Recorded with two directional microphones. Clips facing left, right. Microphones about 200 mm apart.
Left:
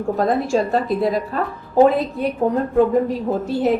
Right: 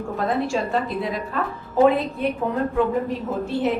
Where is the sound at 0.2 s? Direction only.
40° left (ahead or behind).